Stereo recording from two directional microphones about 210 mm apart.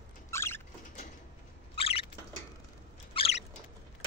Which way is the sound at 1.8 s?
25° left (ahead or behind).